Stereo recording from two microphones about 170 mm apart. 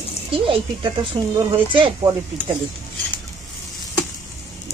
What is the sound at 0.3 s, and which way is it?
Speech, 30° right (ahead or behind).